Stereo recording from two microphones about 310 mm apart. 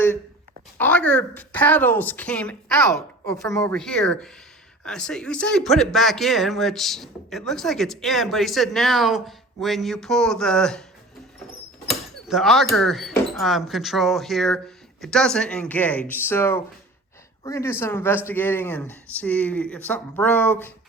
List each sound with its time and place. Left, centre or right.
0.8 s speech: centre
11.9 s speech: centre